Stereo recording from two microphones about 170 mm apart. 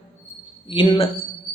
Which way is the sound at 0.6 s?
30° left (ahead or behind).